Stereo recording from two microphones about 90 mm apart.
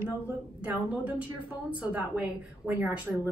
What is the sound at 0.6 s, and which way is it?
A woman's voice, 15° right (ahead or behind).